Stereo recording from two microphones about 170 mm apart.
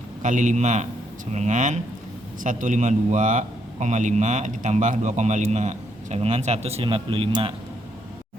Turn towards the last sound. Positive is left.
turn(degrees=-35)  # may be behind; listen again after turning